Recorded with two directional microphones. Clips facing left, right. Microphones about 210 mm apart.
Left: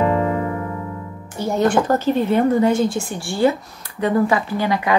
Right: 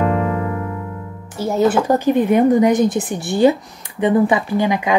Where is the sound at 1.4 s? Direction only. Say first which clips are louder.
Right 2 dB; 5° right (ahead or behind).